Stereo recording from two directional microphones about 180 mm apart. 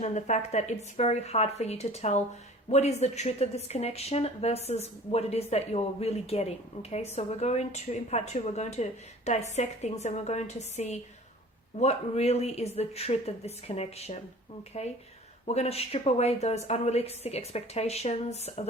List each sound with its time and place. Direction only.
0.0 s a woman's voice: 40° left (ahead or behind)